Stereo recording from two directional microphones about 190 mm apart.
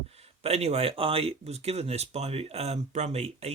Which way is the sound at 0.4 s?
35° right (ahead or behind).